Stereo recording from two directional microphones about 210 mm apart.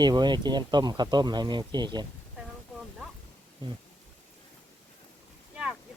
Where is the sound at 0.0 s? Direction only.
20° right (ahead or behind).